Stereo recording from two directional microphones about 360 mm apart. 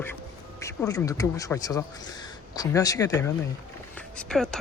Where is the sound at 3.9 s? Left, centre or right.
Centre.